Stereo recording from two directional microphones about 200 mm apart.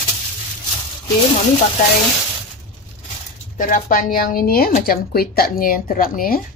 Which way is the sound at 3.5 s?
40° left (ahead or behind).